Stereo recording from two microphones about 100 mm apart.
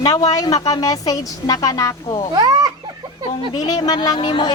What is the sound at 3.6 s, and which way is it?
Speech, 40° left (ahead or behind).